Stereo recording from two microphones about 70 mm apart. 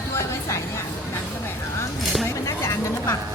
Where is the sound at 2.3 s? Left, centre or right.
Left.